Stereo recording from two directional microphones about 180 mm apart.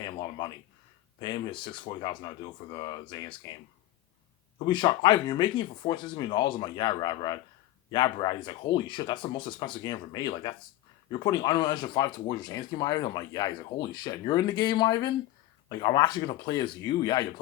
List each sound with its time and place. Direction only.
0.0 s a sound: 25° left (ahead or behind)
1.2 s speech: 25° left (ahead or behind)
4.6 s speech: 25° left (ahead or behind)